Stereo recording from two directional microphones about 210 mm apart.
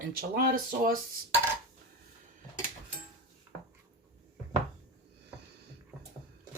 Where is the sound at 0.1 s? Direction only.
45° right (ahead or behind).